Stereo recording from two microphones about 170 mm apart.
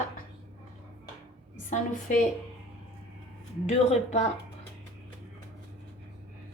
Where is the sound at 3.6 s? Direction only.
40° left (ahead or behind).